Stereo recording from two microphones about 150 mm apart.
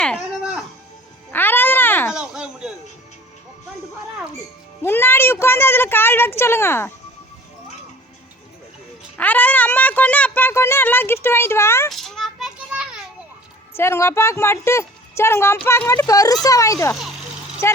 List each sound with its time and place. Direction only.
1.3 s music: 15° left (ahead or behind)
2.1 s a sound: 5° right (ahead or behind)
4.8 s speech: 15° left (ahead or behind)
9.1 s speech: 10° left (ahead or behind)
11.9 s child singing: centre (ahead or behind)
13.7 s speech: 15° left (ahead or behind)
16.9 s a child's voice: centre (ahead or behind)
17.6 s speech: 15° left (ahead or behind)